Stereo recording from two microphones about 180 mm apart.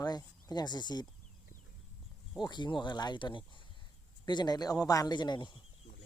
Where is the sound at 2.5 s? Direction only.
25° left (ahead or behind).